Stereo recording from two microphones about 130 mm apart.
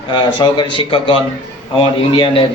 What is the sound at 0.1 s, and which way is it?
A man's voice, 35° left (ahead or behind).